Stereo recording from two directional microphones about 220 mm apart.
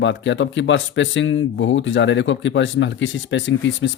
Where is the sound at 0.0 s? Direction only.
55° left (ahead or behind).